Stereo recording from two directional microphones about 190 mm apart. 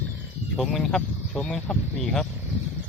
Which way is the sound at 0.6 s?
Centre (ahead or behind).